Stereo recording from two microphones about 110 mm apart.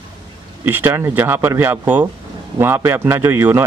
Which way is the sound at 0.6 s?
20° right (ahead or behind).